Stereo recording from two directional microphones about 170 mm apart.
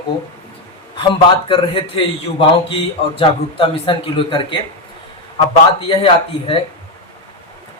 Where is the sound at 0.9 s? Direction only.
30° left (ahead or behind).